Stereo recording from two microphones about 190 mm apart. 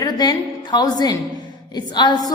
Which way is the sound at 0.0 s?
20° left (ahead or behind).